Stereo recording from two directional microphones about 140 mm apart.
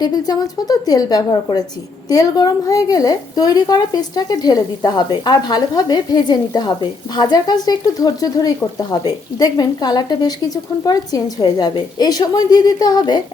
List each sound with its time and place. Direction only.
0.0 s a woman's voice: 30° left (ahead or behind)